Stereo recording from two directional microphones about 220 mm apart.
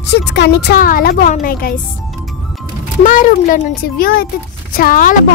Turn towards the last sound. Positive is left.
turn(degrees=40)  # may be behind; listen again after turning